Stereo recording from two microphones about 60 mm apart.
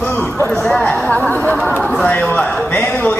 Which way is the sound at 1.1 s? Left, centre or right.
Left.